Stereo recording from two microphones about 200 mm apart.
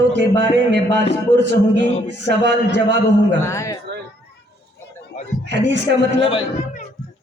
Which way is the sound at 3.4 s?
15° left (ahead or behind).